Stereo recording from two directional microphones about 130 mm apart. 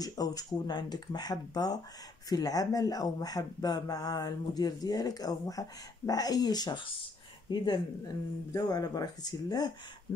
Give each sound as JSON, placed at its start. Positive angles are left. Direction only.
{"t": 0.0, "sound": "speech", "side_deg": 30}